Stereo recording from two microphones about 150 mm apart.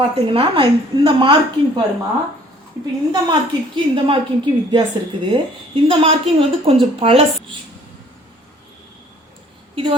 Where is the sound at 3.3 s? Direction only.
30° right (ahead or behind).